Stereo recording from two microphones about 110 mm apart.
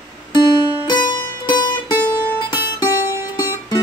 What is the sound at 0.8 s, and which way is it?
Music, 40° left (ahead or behind).